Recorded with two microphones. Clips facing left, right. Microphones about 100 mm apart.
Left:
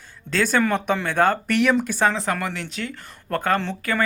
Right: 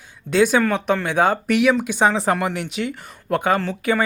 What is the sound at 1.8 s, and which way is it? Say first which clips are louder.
Speech: right 3 dB; 15° right (ahead or behind).